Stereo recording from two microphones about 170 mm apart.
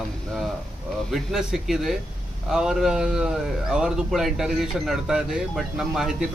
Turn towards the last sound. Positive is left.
turn(degrees=-5)  # may be behind; listen again after turning